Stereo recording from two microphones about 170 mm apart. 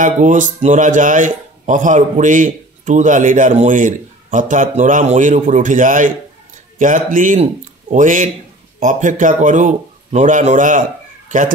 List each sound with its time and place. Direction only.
0.0 s speech: 50° right (ahead or behind)